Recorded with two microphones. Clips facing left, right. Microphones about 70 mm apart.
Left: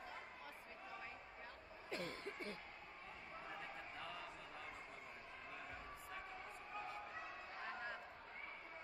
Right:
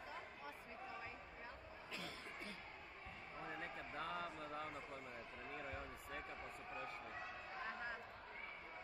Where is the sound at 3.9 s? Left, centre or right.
Right.